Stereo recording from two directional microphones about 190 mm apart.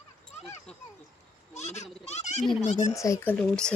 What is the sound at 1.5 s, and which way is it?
Speech, 35° left (ahead or behind).